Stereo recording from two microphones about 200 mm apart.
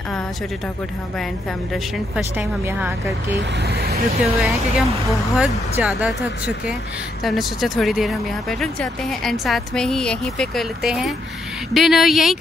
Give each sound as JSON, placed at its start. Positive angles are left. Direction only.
{"t": 2.1, "sound": "speech", "side_deg": -10}
{"t": 3.6, "sound": "speech", "side_deg": -50}
{"t": 4.4, "sound": "speech", "side_deg": 0}